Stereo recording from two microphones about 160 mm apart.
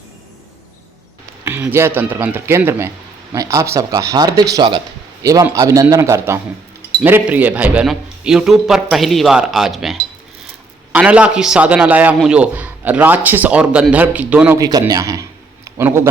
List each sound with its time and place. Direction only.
1.5 s speech: 15° right (ahead or behind)
14.6 s a man's voice: 25° right (ahead or behind)